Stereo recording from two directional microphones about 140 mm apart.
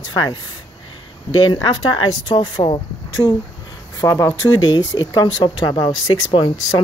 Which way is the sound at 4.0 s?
20° left (ahead or behind).